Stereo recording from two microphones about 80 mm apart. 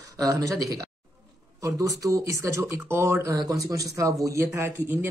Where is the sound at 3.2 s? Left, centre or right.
Right.